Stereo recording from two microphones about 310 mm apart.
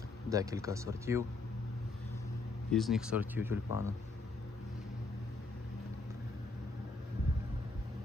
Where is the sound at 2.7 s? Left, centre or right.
Centre.